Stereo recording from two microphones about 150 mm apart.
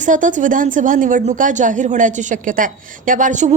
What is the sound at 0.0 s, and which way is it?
A woman's voice, 60° right (ahead or behind).